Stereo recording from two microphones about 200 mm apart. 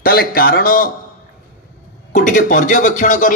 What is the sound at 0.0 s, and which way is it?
Speech, 45° left (ahead or behind).